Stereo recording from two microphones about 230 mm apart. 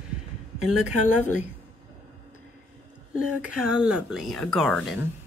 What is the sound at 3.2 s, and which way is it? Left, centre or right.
Speech, centre.